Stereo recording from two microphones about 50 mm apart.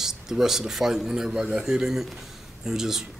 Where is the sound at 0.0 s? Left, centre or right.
Centre.